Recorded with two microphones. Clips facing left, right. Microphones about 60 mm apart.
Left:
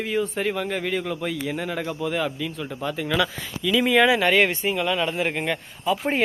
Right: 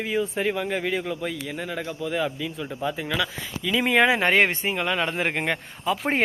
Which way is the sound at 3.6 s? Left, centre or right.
Right.